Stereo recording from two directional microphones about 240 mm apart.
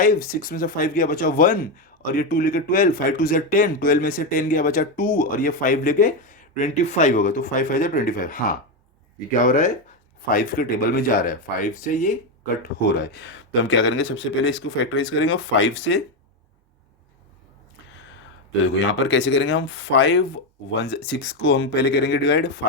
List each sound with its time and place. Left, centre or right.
0.0 s speech: left
13.0 s speech: left
18.9 s speech: left